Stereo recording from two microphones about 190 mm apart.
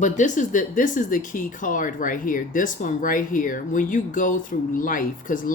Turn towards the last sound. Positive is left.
turn(degrees=45)  # may be behind; listen again after turning